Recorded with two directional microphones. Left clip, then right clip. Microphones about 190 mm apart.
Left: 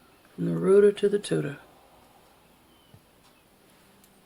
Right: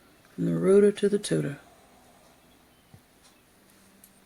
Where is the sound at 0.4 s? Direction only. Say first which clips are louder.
Left 1 dB; 40° right (ahead or behind).